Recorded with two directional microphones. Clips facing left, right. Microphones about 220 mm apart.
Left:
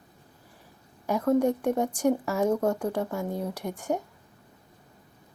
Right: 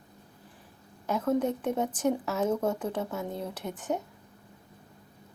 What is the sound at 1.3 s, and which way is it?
Speech, 10° left (ahead or behind).